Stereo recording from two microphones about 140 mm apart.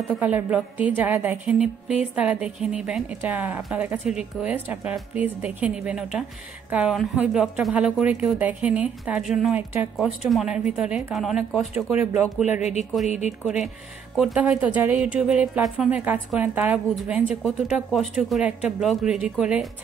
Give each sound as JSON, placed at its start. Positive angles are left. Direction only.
{"t": 0.2, "sound": "a woman's voice", "side_deg": -10}
{"t": 11.5, "sound": "speech", "side_deg": -15}
{"t": 12.4, "sound": "speech", "side_deg": 55}
{"t": 14.1, "sound": "a woman's voice", "side_deg": -5}